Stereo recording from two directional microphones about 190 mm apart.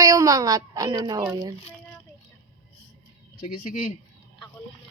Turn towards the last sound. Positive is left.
turn(degrees=45)  # may be behind; listen again after turning